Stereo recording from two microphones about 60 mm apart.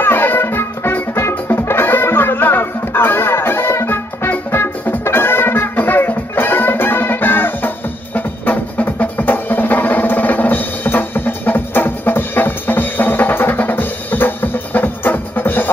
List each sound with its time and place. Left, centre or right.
0.0 s music: left